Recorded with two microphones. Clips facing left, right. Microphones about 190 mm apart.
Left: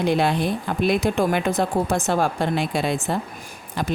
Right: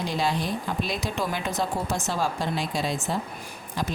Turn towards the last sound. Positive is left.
turn(degrees=60)  # may be behind; listen again after turning